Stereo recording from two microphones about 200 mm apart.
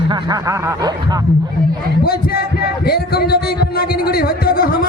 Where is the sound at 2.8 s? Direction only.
50° left (ahead or behind).